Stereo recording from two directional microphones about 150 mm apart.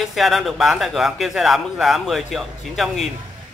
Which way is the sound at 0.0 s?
Centre (ahead or behind).